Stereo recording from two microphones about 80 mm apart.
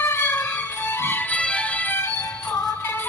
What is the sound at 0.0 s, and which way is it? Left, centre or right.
Music, left.